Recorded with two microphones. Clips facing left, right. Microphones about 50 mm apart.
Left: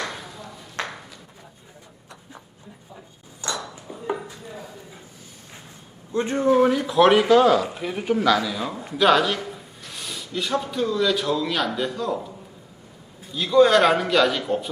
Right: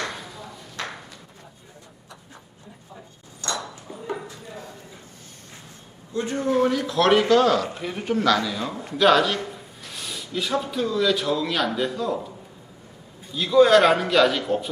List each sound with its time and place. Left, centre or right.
0.0 s a sound: centre
3.6 s ping: centre
4.3 s chopping: centre
6.1 s a man's voice: left
6.5 s a man's voice: centre
13.3 s speech: centre